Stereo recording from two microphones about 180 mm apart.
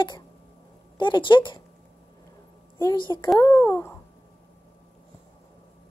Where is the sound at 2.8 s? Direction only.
20° left (ahead or behind).